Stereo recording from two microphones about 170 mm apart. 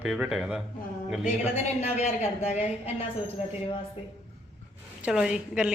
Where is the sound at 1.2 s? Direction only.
40° left (ahead or behind).